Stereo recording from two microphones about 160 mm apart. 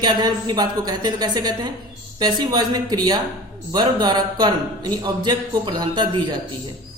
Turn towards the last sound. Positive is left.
turn(degrees=-30)  # may be behind; listen again after turning